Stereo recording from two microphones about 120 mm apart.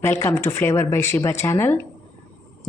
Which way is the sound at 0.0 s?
20° left (ahead or behind).